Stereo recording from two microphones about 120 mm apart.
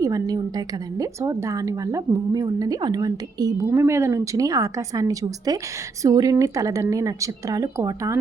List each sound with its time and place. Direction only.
0.0 s a woman's voice: 30° right (ahead or behind)